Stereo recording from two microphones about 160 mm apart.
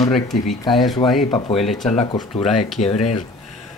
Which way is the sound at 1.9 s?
40° left (ahead or behind).